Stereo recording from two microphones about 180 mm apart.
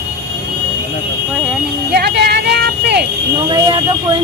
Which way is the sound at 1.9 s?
65° right (ahead or behind).